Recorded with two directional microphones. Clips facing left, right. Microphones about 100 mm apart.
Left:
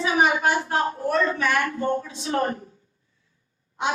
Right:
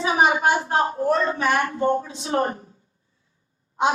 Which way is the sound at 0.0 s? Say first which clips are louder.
Right 2 dB; 25° right (ahead or behind).